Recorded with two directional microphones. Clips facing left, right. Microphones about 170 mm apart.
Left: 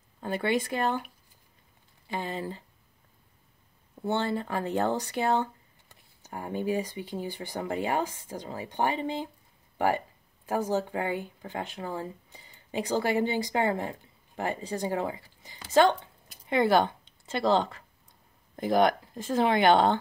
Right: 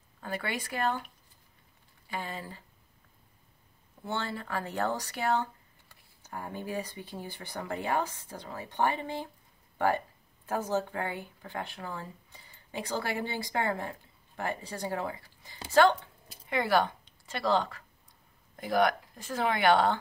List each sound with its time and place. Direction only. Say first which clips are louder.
0.2 s speech: left 8 dB; 25° left (ahead or behind)
2.0 s speech: left 5 dB; 25° left (ahead or behind)
4.1 s a woman's voice: left 6 dB; 20° left (ahead or behind)